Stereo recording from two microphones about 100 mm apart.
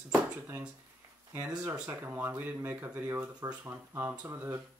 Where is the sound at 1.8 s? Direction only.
20° right (ahead or behind).